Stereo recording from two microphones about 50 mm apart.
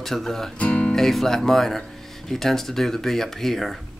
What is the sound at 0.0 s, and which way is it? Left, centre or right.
Speech, centre.